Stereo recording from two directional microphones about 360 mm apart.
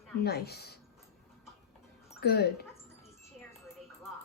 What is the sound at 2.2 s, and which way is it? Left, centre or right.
Dog, left.